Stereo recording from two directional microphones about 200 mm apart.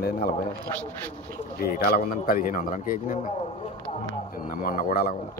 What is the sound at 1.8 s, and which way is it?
Speech, 45° left (ahead or behind).